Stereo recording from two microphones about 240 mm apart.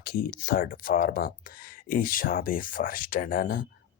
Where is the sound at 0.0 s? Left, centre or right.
Left.